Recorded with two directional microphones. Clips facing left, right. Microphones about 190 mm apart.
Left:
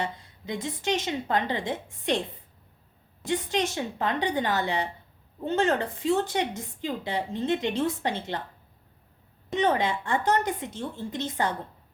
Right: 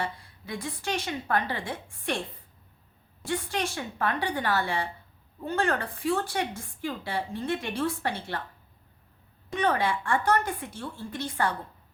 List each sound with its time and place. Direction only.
0.0 s a woman's voice: 20° left (ahead or behind)
3.2 s a woman's voice: 20° left (ahead or behind)
9.5 s a woman's voice: 20° left (ahead or behind)